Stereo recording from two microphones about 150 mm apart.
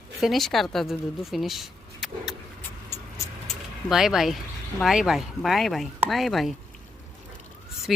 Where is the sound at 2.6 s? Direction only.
15° left (ahead or behind).